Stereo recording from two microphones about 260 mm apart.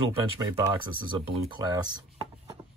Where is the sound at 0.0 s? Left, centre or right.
Centre.